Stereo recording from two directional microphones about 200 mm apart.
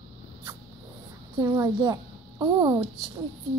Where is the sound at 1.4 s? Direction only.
20° right (ahead or behind).